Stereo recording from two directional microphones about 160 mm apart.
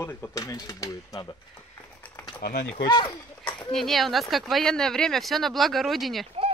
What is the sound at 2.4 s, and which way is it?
Speech, 60° left (ahead or behind).